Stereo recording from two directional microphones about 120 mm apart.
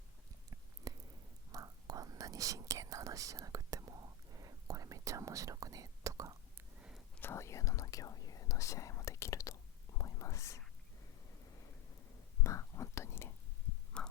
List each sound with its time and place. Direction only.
0.9 s a sound: 30° right (ahead or behind)
1.5 s whispering: 30° right (ahead or behind)
6.7 s whispering: 10° right (ahead or behind)
7.2 s whispering: 20° left (ahead or behind)
12.4 s whispering: 25° left (ahead or behind)
14.0 s heart sounds: 10° left (ahead or behind)